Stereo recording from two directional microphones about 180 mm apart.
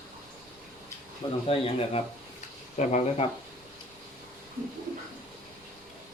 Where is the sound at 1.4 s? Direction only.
35° left (ahead or behind).